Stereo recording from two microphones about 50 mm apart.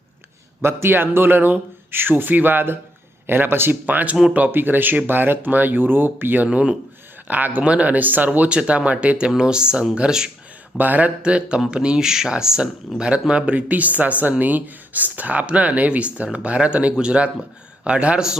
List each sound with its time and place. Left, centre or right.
0.6 s speech: right
6.5 s speech: right
7.3 s speech: right
7.6 s speech: right
10.8 s speech: right
11.2 s speech: right